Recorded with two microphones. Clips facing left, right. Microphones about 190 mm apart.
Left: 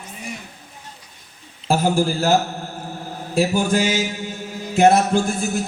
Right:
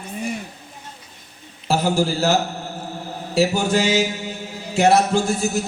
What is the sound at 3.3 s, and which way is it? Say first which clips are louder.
A man's voice: even; 50° left (ahead or behind).